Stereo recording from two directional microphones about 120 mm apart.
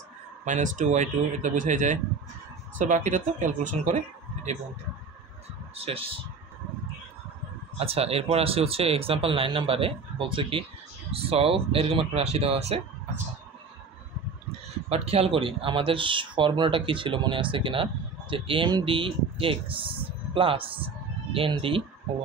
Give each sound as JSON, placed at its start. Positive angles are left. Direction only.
{"t": 0.5, "sound": "speech", "side_deg": -90}
{"t": 5.8, "sound": "speech", "side_deg": -50}
{"t": 7.8, "sound": "speech", "side_deg": -55}
{"t": 14.9, "sound": "speech", "side_deg": -55}